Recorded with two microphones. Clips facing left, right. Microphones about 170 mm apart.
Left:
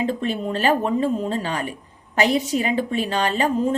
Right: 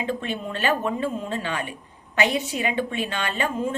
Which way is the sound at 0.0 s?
35° left (ahead or behind).